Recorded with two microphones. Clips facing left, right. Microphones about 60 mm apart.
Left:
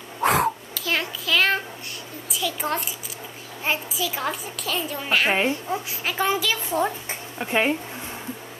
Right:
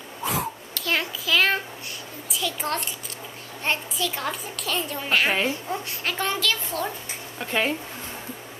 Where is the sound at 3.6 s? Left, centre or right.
Centre.